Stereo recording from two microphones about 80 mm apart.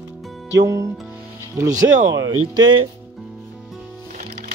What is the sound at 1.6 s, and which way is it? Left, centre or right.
Speech, right.